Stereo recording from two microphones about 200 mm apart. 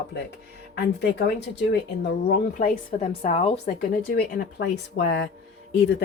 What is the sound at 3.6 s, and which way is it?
Speech, 50° left (ahead or behind).